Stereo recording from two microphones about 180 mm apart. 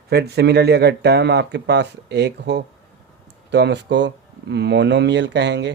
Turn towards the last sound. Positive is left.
turn(degrees=-75)  # may be behind; listen again after turning